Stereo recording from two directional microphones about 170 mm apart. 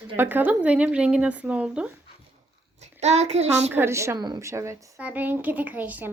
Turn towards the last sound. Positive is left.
turn(degrees=-10)  # may be behind; listen again after turning